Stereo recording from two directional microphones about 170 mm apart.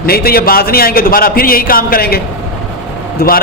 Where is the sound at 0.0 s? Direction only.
60° left (ahead or behind).